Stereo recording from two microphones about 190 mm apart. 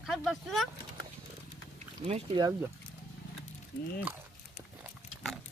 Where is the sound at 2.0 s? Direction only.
30° right (ahead or behind).